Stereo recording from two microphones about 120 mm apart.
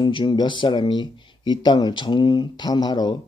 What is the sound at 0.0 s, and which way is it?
Speech, 40° left (ahead or behind).